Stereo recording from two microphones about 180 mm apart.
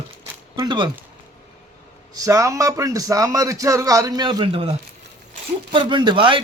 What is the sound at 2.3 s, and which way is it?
Speech, 15° right (ahead or behind).